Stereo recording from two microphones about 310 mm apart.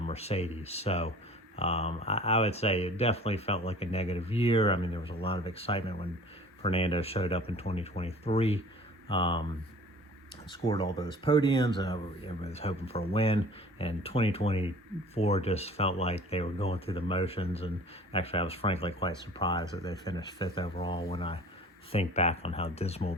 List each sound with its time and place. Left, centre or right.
0.1 s speech: centre
10.5 s speech: centre